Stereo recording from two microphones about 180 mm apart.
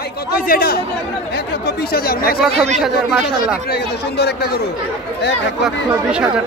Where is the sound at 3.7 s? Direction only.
65° left (ahead or behind).